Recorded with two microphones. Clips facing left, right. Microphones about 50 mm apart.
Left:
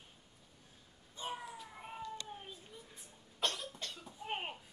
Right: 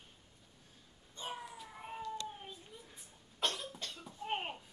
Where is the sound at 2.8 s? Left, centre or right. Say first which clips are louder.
Left 1 dB; centre.